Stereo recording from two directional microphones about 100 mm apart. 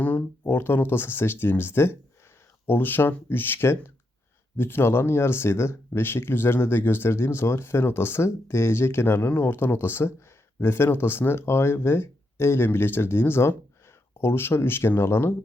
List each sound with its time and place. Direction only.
0.0 s speech: 20° left (ahead or behind)